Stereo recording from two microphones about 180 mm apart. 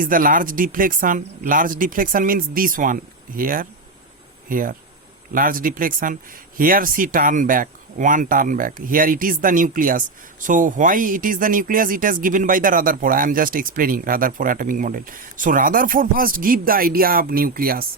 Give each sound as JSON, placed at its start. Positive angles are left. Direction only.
{"t": 0.0, "sound": "speech", "side_deg": -50}